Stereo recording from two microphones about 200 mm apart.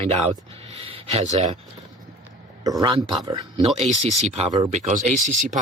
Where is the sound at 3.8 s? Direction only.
35° right (ahead or behind).